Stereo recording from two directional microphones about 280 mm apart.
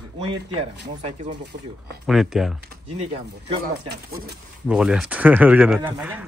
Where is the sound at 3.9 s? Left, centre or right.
Right.